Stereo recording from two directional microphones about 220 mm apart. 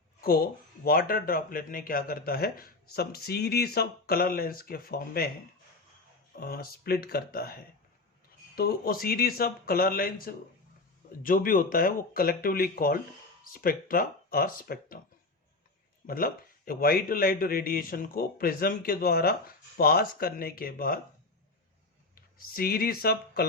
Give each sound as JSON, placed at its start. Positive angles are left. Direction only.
{"t": 0.2, "sound": "speech", "side_deg": 45}
{"t": 6.4, "sound": "speech", "side_deg": 40}
{"t": 16.0, "sound": "speech", "side_deg": 40}
{"t": 22.1, "sound": "speech", "side_deg": 40}